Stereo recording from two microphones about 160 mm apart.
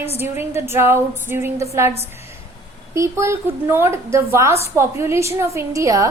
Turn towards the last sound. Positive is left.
turn(degrees=-20)  # may be behind; listen again after turning